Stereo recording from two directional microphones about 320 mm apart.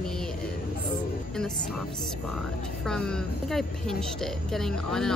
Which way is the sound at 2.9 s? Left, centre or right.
Centre.